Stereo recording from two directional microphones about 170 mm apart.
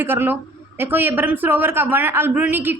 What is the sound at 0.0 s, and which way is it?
Speech, 10° right (ahead or behind).